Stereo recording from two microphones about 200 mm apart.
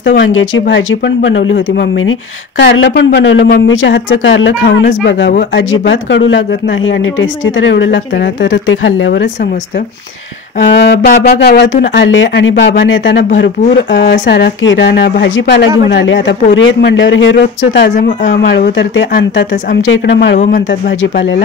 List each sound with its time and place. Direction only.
0.0 s speech: 65° left (ahead or behind)
10.7 s speech: 55° left (ahead or behind)
17.7 s speech: 50° left (ahead or behind)
20.3 s a man's voice: 45° left (ahead or behind)
21.0 s speech: 65° left (ahead or behind)